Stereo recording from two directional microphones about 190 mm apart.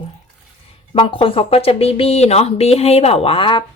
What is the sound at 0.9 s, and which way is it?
Speech, 30° left (ahead or behind).